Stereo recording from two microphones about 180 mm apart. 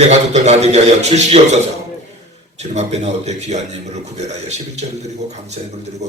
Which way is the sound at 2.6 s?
40° right (ahead or behind).